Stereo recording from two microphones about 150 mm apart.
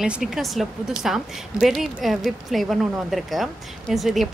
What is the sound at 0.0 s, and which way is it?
A woman's voice, centre (ahead or behind).